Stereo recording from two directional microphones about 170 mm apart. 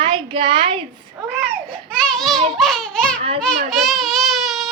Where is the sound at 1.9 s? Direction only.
Centre (ahead or behind).